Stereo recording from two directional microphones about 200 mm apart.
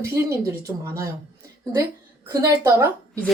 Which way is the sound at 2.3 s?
15° right (ahead or behind).